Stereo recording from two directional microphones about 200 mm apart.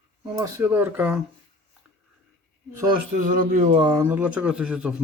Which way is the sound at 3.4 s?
40° right (ahead or behind).